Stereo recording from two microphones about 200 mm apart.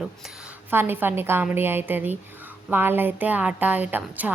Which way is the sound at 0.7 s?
10° right (ahead or behind).